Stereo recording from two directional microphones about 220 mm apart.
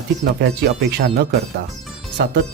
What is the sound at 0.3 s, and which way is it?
Speech, 50° right (ahead or behind).